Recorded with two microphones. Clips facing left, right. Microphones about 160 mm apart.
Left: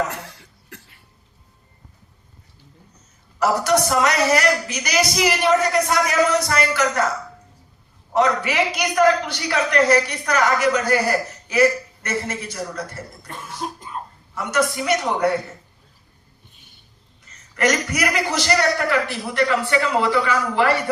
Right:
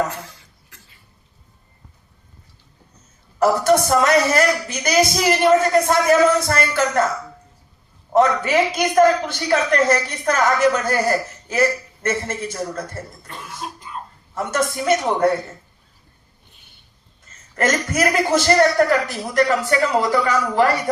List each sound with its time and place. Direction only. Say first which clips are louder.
0.3 s cough: left 7 dB; 70° left (ahead or behind)
3.3 s a man's voice: right 3 dB; 50° right (ahead or behind)
8.1 s a man's voice: right 3 dB; 50° right (ahead or behind)
12.0 s a man's voice: right 4 dB; 50° right (ahead or behind)
13.6 s cough: left 4 dB; 40° left (ahead or behind)
14.3 s a man's voice: even; 50° right (ahead or behind)
17.5 s a man's voice: even; 50° right (ahead or behind)